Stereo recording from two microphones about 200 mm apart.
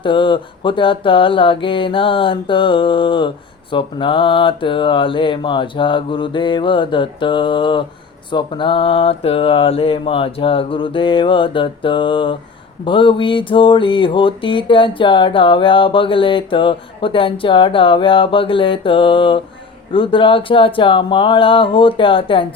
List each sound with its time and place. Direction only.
0.0 s mantra: 25° left (ahead or behind)